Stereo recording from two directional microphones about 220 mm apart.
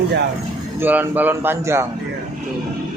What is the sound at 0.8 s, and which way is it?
A man's voice, 10° right (ahead or behind).